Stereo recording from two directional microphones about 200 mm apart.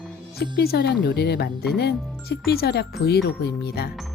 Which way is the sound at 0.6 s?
50° left (ahead or behind).